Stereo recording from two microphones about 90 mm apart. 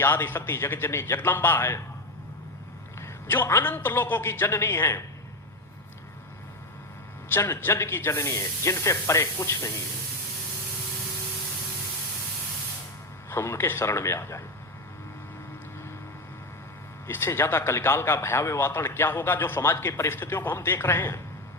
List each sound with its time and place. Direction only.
0.0 s a man's voice: 25° left (ahead or behind)
3.0 s a man's voice: 25° left (ahead or behind)
7.3 s speech: 25° left (ahead or behind)
13.3 s a man's voice: 25° left (ahead or behind)
17.1 s a man's voice: 25° left (ahead or behind)